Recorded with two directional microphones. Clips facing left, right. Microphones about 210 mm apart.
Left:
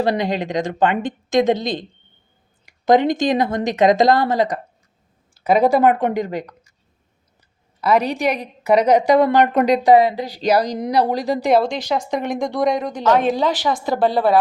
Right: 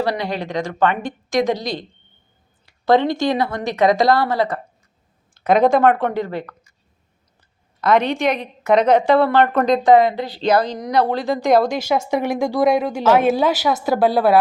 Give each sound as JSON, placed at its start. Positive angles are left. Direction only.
{"t": 0.0, "sound": "a woman's voice", "side_deg": 20}
{"t": 5.5, "sound": "speech", "side_deg": 5}
{"t": 7.8, "sound": "a woman's voice", "side_deg": 5}
{"t": 8.0, "sound": "a woman's voice", "side_deg": 35}
{"t": 8.6, "sound": "speech", "side_deg": 10}
{"t": 11.2, "sound": "a woman's voice", "side_deg": 40}
{"t": 11.4, "sound": "a woman's voice", "side_deg": 0}